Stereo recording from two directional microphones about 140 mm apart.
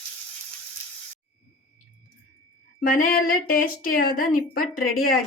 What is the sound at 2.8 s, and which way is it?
Speech, 90° left.